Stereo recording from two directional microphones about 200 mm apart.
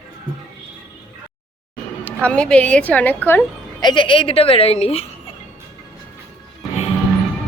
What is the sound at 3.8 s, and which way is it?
A woman's voice, 25° left (ahead or behind).